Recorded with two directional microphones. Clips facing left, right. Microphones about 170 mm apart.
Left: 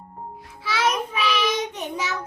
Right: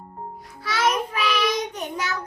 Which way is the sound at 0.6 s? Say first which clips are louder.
Right 1 dB; centre (ahead or behind).